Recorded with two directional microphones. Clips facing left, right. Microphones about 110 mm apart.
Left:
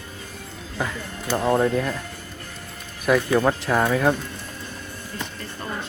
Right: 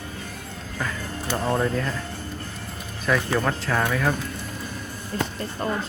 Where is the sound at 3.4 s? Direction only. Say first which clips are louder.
Left 4 dB; 15° left (ahead or behind).